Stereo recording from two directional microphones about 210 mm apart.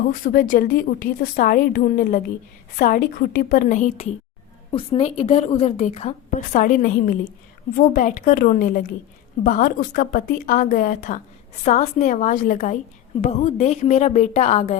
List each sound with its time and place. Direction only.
0.1 s a woman's voice: 40° left (ahead or behind)